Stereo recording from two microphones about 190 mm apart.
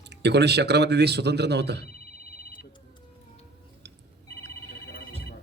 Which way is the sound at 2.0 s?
50° left (ahead or behind).